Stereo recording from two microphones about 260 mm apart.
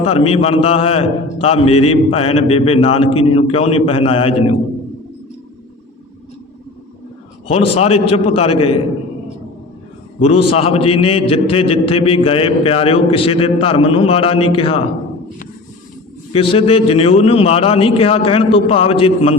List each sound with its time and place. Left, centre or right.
0.0 s a man's voice: left
7.4 s a man's voice: left
10.2 s a man's voice: left
16.3 s a man's voice: left